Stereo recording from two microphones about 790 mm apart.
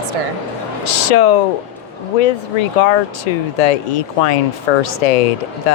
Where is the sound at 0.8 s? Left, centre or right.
Left.